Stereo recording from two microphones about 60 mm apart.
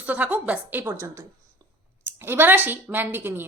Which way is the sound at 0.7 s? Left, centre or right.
Right.